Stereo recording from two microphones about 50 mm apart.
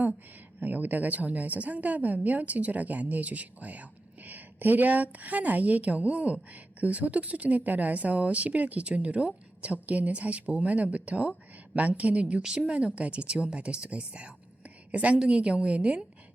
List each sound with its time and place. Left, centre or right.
0.6 s a woman's voice: right